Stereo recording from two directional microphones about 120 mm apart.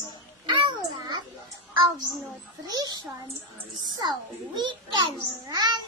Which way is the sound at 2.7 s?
35° right (ahead or behind).